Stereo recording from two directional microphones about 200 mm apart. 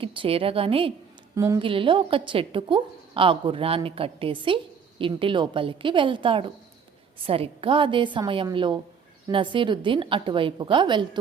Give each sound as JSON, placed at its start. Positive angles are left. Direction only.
{"t": 0.0, "sound": "a woman's voice", "side_deg": -25}